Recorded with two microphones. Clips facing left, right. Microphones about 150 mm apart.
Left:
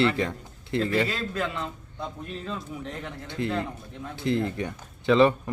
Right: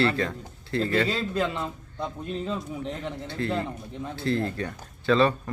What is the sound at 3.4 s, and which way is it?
A man's voice, 15° left (ahead or behind).